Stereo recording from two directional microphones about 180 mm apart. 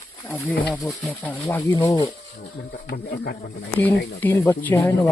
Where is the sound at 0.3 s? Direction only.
15° left (ahead or behind).